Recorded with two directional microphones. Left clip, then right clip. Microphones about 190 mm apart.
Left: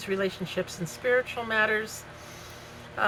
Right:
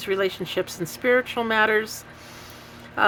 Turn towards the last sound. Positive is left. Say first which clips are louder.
# right 7 dB
turn(degrees=-50)  # may be behind; listen again after turning